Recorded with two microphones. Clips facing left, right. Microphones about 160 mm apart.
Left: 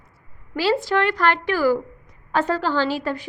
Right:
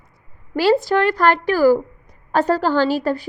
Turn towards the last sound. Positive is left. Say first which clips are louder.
# right 5 dB
turn(degrees=-40)  # may be behind; listen again after turning